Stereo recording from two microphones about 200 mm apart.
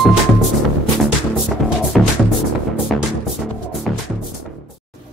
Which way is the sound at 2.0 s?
Centre (ahead or behind).